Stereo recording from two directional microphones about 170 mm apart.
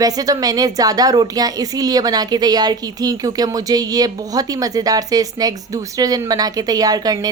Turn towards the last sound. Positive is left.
turn(degrees=-20)  # may be behind; listen again after turning